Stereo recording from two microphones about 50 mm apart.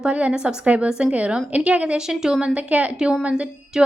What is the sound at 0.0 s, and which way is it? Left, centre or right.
A woman's voice, right.